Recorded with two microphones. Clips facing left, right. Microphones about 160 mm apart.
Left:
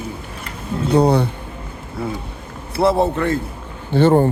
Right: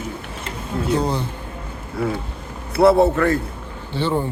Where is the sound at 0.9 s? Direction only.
65° left (ahead or behind).